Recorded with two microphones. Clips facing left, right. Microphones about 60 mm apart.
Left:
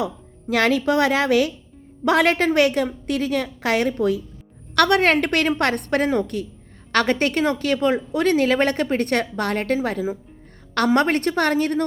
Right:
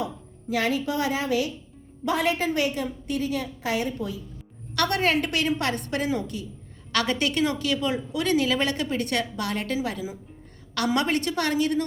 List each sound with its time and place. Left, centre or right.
0.0 s a woman's voice: left